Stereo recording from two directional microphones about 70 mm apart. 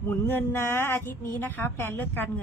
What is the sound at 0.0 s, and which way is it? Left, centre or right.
Speech, left.